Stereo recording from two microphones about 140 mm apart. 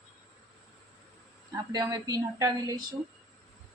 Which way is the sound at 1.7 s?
25° right (ahead or behind).